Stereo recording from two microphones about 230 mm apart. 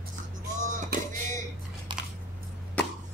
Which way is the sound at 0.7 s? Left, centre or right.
Right.